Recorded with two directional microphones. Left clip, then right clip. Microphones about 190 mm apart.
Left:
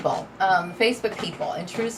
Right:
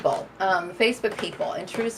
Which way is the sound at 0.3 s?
50° right (ahead or behind).